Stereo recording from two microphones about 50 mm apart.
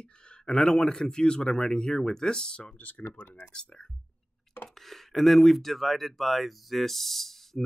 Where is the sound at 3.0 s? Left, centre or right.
Left.